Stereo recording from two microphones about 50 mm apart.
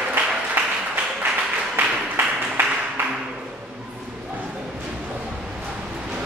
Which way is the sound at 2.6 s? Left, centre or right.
Right.